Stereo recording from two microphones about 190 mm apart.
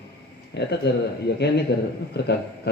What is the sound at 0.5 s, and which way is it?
Speech, 60° left (ahead or behind).